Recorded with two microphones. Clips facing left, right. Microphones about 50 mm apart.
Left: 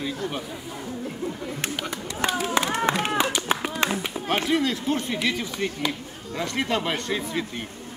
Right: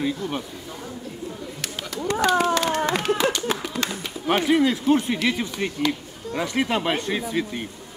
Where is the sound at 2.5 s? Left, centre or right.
Left.